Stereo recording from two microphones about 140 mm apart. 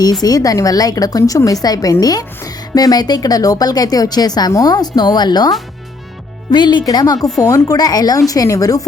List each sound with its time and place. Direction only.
0.0 s a woman's voice: 25° left (ahead or behind)